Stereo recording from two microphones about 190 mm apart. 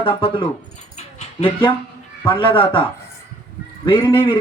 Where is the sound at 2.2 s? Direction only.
25° left (ahead or behind).